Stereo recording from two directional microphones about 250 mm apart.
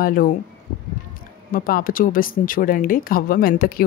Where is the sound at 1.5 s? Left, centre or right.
Left.